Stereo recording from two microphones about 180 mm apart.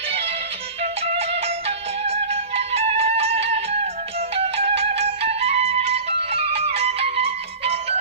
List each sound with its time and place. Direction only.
0.8 s music: 35° right (ahead or behind)